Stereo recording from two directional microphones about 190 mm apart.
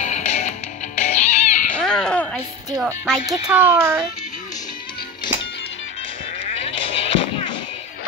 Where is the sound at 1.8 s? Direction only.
5° left (ahead or behind).